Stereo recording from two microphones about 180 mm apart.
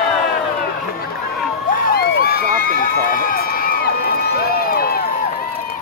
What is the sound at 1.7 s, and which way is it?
Crowd, 55° left (ahead or behind).